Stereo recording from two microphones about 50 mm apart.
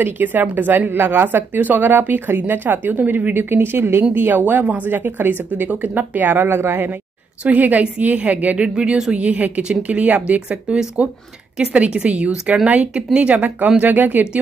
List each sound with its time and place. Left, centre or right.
0.0 s a woman's voice: right
3.4 s a woman's voice: right
7.4 s a woman's voice: right
8.6 s speech: centre
9.1 s a woman's voice: right